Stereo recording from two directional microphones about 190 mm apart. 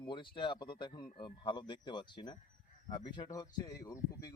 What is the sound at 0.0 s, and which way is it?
A man's voice, 25° left (ahead or behind).